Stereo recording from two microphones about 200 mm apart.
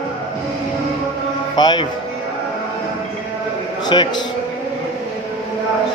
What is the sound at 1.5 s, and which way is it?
Speech, 20° left (ahead or behind).